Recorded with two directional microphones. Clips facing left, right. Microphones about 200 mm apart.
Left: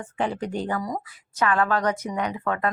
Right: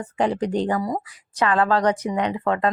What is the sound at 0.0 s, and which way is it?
A woman's voice, 35° right (ahead or behind).